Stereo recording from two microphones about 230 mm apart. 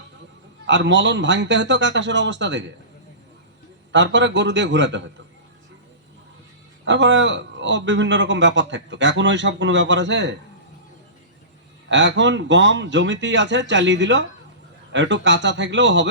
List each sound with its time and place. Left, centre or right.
0.7 s a man's voice: right
3.9 s a man's voice: right
6.8 s a man's voice: right
11.9 s a man's voice: right